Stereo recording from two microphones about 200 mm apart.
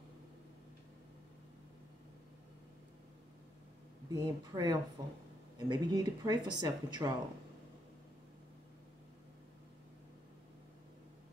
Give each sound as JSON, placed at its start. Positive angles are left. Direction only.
{"t": 4.1, "sound": "speech", "side_deg": -20}